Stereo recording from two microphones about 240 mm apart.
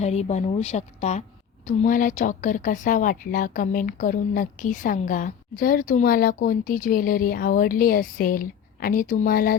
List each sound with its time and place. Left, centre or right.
0.0 s a woman's voice: left